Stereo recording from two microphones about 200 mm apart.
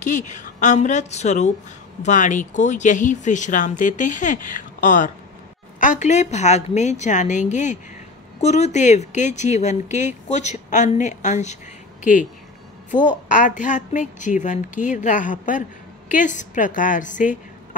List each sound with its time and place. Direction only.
0.0 s a woman's voice: 40° left (ahead or behind)